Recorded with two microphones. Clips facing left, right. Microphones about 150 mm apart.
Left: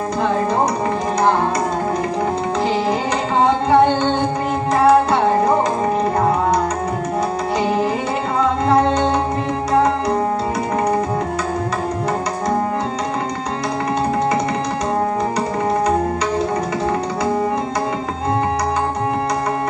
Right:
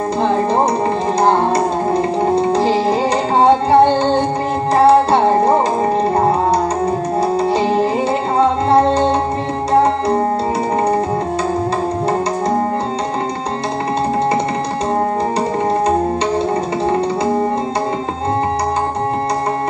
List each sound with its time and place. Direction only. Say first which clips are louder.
2.5 s music: right 4 dB; 30° right (ahead or behind)
7.5 s music: right 3 dB; 30° right (ahead or behind)